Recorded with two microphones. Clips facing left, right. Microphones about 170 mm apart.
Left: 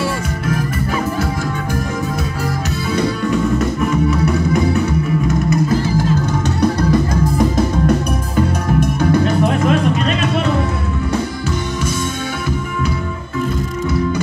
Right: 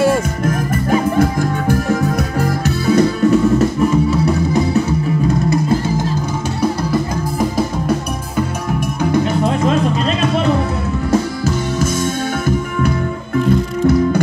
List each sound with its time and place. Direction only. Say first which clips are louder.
5.5 s music: even; 30° right (ahead or behind)
7.3 s music: even; 5° right (ahead or behind)